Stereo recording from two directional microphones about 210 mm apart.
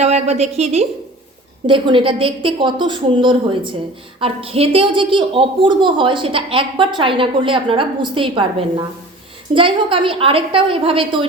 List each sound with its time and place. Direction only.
0.0 s a woman's voice: 30° right (ahead or behind)